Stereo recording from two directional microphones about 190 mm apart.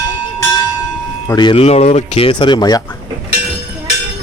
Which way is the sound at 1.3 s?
25° left (ahead or behind).